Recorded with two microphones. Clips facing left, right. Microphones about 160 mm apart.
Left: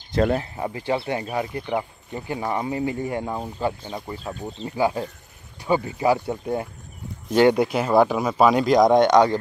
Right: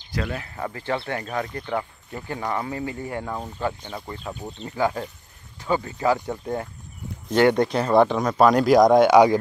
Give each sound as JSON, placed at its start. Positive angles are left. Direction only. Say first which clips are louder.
{"t": 0.2, "sound": "speech", "louder": "left 9 dB", "side_deg": 40}
{"t": 0.6, "sound": "speech", "louder": "left 2 dB", "side_deg": 20}